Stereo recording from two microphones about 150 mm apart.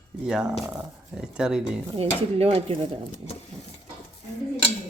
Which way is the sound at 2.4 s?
40° right (ahead or behind).